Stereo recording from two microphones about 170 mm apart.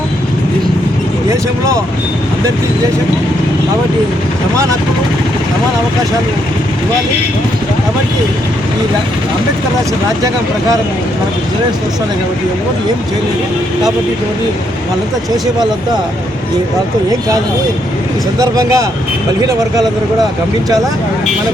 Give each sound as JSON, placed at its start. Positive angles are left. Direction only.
{"t": 18.3, "sound": "speech", "side_deg": -20}